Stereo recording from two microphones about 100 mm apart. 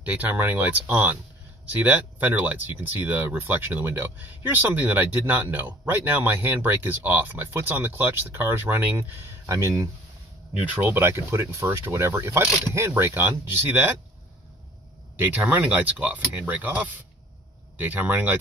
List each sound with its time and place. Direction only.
0.0 s speech: 15° right (ahead or behind)
10.6 s speech: 20° right (ahead or behind)
15.1 s speech: 15° right (ahead or behind)